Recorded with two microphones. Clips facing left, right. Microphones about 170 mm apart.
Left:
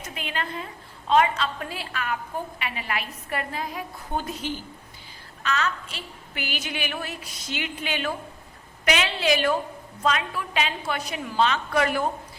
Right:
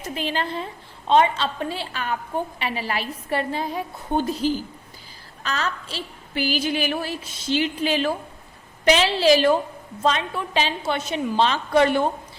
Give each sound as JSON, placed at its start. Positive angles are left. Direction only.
{"t": 0.0, "sound": "a woman's voice", "side_deg": -35}